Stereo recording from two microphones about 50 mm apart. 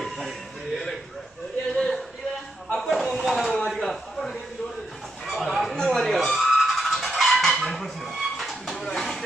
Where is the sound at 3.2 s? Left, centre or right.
Centre.